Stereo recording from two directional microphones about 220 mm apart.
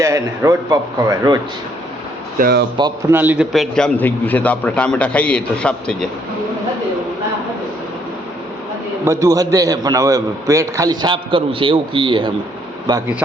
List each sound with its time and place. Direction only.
0.0 s a man's voice: 15° right (ahead or behind)
2.4 s speech: 45° right (ahead or behind)
2.7 s a man's voice: 15° right (ahead or behind); by 6.1 s 5° left (ahead or behind)
9.0 s a man's voice: 15° right (ahead or behind)